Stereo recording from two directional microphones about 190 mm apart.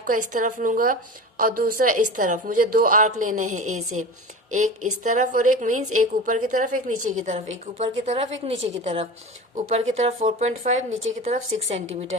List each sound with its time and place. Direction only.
0.0 s a woman's voice: 45° right (ahead or behind)